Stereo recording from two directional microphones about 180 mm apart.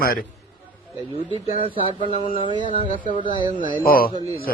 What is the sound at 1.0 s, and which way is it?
Speech, 30° right (ahead or behind).